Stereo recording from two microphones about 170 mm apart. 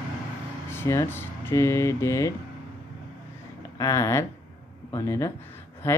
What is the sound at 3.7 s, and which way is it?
Speech, 20° left (ahead or behind).